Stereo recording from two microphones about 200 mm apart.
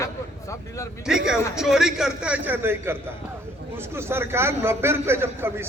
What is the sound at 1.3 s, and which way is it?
A man's voice, 5° right (ahead or behind).